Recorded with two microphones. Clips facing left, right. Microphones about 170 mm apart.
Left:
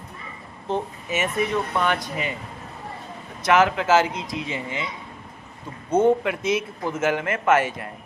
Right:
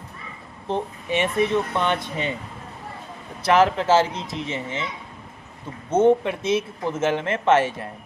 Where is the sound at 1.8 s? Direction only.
25° right (ahead or behind).